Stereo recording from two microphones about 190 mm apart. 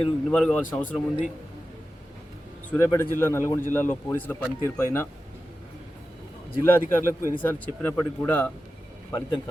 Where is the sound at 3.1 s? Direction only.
15° left (ahead or behind).